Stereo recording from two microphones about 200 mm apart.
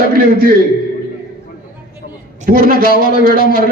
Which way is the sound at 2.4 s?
45° right (ahead or behind).